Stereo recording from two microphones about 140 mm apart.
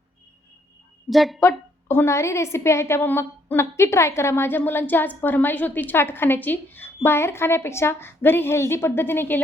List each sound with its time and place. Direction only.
1.1 s speech: centre (ahead or behind)
1.4 s a woman's voice: 15° left (ahead or behind)